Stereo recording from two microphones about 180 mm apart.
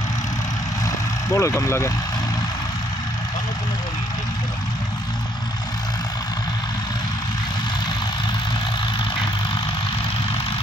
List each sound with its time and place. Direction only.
0.8 s vehicle: 15° left (ahead or behind)